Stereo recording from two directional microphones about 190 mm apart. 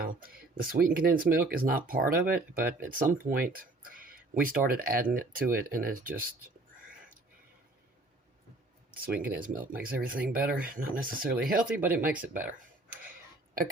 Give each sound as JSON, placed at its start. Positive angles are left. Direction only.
{"t": 0.0, "sound": "speech", "side_deg": -50}
{"t": 8.9, "sound": "speech", "side_deg": -50}
{"t": 11.6, "sound": "speech", "side_deg": -10}
{"t": 12.4, "sound": "a sound", "side_deg": -10}